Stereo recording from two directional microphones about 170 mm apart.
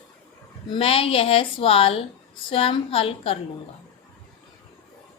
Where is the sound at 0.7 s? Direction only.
35° left (ahead or behind).